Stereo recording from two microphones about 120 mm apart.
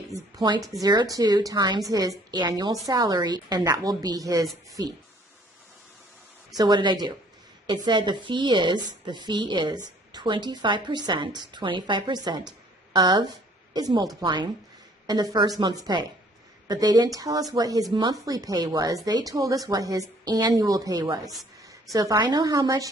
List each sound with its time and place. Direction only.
0.1 s a woman's voice: 35° right (ahead or behind)
6.5 s a woman's voice: 35° right (ahead or behind)